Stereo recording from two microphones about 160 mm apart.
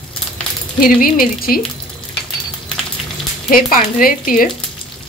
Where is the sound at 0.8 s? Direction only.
60° left (ahead or behind).